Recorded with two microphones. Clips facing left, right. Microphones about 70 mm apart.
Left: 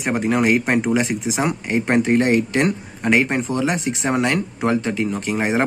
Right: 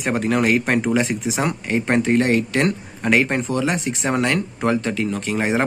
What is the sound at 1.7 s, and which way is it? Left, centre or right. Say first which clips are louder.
Speech: left 1 dB; left.